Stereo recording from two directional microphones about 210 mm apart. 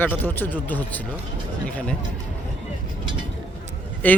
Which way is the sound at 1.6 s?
5° left (ahead or behind).